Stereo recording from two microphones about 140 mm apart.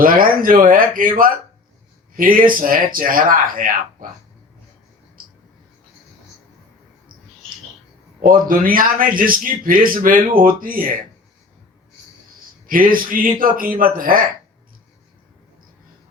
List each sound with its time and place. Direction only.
0.0 s a man's voice: 85° right
8.2 s a man's voice: 85° right
12.6 s a man's voice: 80° right